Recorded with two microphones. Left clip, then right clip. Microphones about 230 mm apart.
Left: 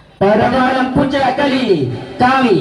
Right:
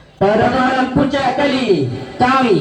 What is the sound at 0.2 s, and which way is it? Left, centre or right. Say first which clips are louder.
Speech: left 1 dB; left.